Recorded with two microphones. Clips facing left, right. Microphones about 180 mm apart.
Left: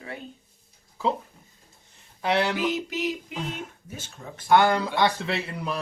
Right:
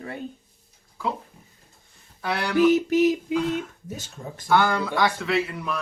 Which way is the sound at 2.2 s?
20° left (ahead or behind).